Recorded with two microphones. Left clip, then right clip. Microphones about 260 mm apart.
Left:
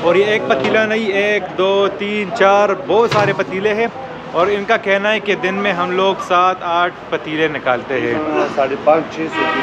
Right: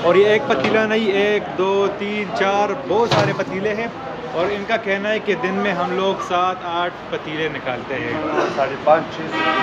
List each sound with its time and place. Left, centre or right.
0.1 s speech: centre
8.9 s speech: left